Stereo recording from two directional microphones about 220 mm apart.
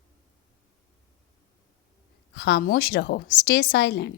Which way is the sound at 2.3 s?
50° left (ahead or behind).